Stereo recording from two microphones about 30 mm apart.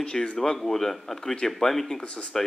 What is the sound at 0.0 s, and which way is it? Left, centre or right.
Speech, left.